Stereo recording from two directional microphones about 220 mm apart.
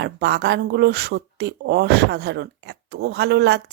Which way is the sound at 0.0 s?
50° right (ahead or behind).